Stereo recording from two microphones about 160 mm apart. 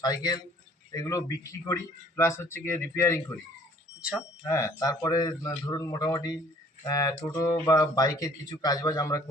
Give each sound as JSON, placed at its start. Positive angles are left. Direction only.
{"t": 0.0, "sound": "a man's voice", "side_deg": 25}
{"t": 4.4, "sound": "a man's voice", "side_deg": 20}